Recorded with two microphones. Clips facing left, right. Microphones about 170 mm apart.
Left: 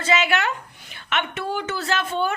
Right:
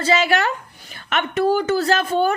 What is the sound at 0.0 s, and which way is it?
A woman's voice, 35° right (ahead or behind).